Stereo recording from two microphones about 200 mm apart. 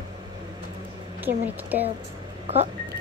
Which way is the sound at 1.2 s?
10° right (ahead or behind).